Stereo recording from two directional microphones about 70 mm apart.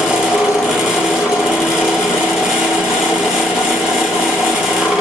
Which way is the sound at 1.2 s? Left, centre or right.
Centre.